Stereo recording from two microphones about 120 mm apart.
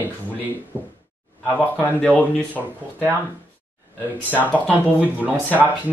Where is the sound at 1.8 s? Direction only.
15° left (ahead or behind).